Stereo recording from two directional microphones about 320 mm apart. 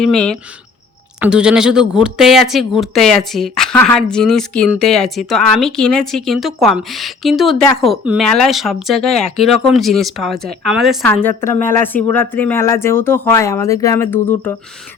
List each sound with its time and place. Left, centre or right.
0.0 s a woman's voice: centre